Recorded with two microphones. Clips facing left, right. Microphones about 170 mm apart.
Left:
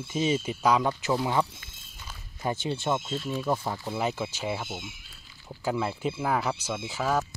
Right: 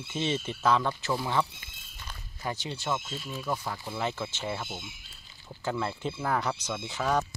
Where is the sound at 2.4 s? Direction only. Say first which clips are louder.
Left 5 dB; 25° left (ahead or behind).